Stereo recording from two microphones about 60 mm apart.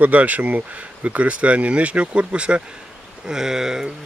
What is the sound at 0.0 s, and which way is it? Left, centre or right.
Speech, right.